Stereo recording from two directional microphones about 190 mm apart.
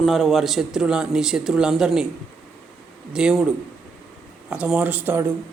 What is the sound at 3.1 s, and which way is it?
Speech, 5° right (ahead or behind).